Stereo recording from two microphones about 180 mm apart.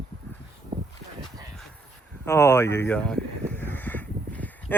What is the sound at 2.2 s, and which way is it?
Speech, 15° left (ahead or behind).